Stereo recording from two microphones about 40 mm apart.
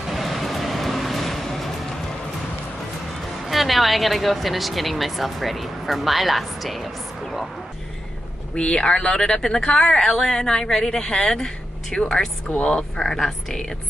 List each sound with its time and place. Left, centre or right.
0.1 s vehicle: centre
3.4 s a woman's voice: centre
8.5 s speech: left